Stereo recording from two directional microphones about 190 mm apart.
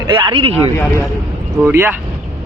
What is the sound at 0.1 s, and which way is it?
Speech, 25° right (ahead or behind).